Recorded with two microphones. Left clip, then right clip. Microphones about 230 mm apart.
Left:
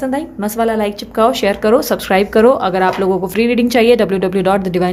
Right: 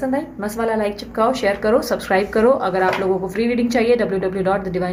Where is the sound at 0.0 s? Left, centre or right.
Left.